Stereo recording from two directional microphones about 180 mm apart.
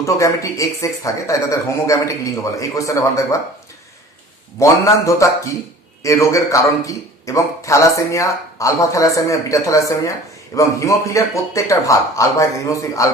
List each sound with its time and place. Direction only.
0.0 s a man's voice: 15° left (ahead or behind)
4.6 s a man's voice: 15° left (ahead or behind)